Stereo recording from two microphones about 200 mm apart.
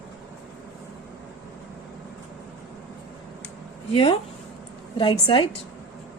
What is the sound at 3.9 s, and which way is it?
Speech, 30° left (ahead or behind).